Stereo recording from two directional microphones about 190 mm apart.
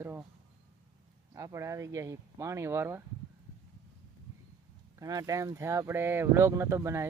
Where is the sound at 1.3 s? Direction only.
15° right (ahead or behind).